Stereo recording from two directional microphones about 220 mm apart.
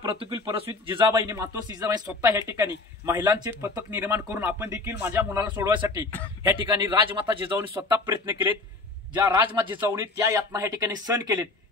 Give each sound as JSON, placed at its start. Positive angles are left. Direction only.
{"t": 0.0, "sound": "a man's voice", "side_deg": -20}